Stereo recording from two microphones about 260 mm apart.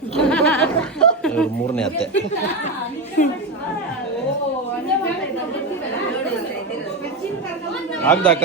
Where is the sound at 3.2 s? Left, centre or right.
Left.